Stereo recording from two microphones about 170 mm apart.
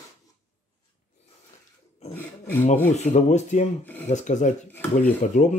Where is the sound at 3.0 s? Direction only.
45° left (ahead or behind).